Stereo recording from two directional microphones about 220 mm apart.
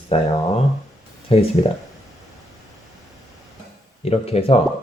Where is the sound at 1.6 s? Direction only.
20° left (ahead or behind).